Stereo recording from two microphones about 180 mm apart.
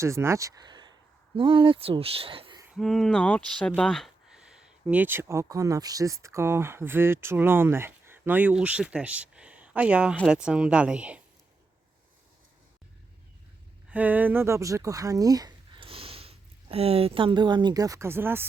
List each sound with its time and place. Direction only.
0.0 s speech: 15° right (ahead or behind)
2.7 s speech: centre (ahead or behind)
13.9 s speech: 10° right (ahead or behind)